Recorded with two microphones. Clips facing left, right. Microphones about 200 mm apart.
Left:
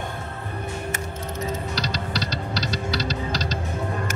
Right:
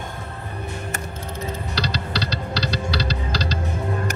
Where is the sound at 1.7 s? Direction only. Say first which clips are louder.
Right 2 dB; 30° right (ahead or behind).